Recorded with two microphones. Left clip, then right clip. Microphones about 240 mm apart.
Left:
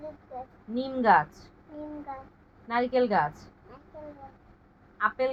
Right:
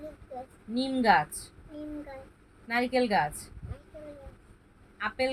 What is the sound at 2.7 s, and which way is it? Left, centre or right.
Speech, centre.